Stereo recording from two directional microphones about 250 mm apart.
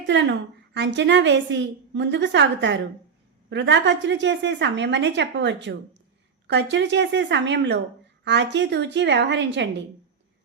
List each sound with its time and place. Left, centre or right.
0.0 s a woman's voice: right